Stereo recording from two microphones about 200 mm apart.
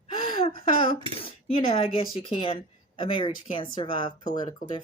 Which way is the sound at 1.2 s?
25° left (ahead or behind).